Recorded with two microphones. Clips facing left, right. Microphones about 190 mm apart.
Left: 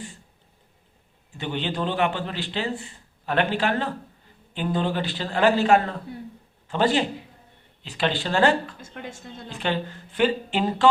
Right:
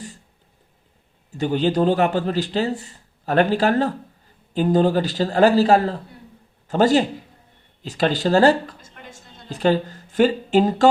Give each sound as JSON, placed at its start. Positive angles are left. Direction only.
{"t": 1.3, "sound": "a man's voice", "side_deg": -40}